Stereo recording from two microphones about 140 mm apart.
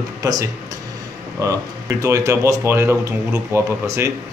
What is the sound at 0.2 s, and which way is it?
Speech, 25° right (ahead or behind).